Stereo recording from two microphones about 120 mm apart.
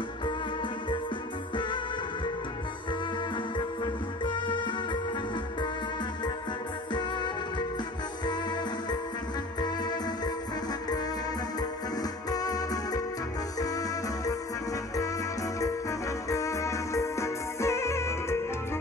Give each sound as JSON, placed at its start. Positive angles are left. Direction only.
{"t": 3.5, "sound": "music", "side_deg": 40}
{"t": 6.9, "sound": "music", "side_deg": 40}
{"t": 9.6, "sound": "music", "side_deg": 35}
{"t": 12.3, "sound": "music", "side_deg": 30}
{"t": 16.3, "sound": "music", "side_deg": 25}